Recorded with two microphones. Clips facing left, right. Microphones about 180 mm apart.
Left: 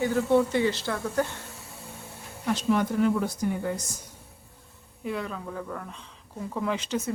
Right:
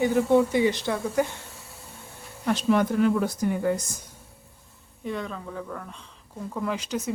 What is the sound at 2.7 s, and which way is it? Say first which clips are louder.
Speech: right 2 dB; 70° right (ahead or behind).